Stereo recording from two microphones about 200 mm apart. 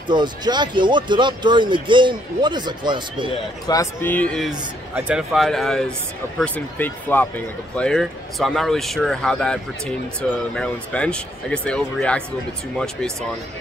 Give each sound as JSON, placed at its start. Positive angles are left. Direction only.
{"t": 0.1, "sound": "speech", "side_deg": -20}
{"t": 3.6, "sound": "a man's voice", "side_deg": 15}